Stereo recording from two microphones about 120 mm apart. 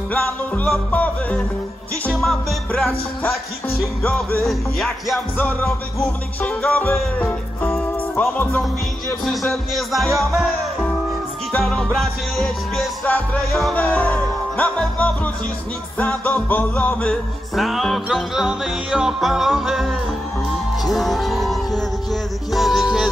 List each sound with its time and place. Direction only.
0.9 s music: 10° left (ahead or behind)
2.1 s music: centre (ahead or behind)
4.0 s music: 10° left (ahead or behind)
4.5 s music: centre (ahead or behind)
5.4 s music: 20° left (ahead or behind)
9.2 s music: centre (ahead or behind)
13.0 s music: 15° left (ahead or behind)
13.5 s music: centre (ahead or behind)
13.7 s music: 10° left (ahead or behind)